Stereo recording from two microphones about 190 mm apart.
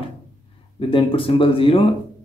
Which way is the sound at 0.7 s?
30° left (ahead or behind).